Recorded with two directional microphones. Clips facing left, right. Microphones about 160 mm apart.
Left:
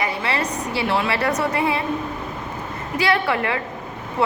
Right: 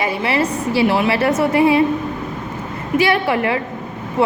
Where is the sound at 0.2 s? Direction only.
20° right (ahead or behind).